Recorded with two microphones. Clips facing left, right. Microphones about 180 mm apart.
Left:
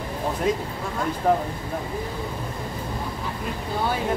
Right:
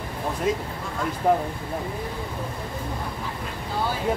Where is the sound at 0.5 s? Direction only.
Centre (ahead or behind).